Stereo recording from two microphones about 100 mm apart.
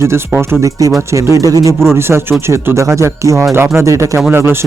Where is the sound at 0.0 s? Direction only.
25° right (ahead or behind).